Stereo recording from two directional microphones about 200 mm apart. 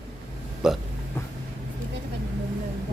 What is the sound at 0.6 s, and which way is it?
Hiccup, 5° right (ahead or behind).